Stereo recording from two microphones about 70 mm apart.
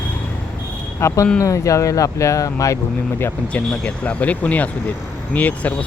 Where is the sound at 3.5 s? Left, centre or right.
Centre.